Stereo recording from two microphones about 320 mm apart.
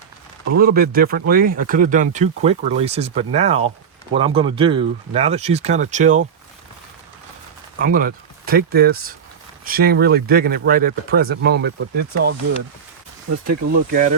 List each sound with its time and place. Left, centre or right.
0.5 s speech: right
7.8 s speech: right
13.7 s speech: right